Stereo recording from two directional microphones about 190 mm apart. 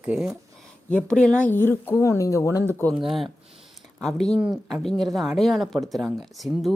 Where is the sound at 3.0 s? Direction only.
Centre (ahead or behind).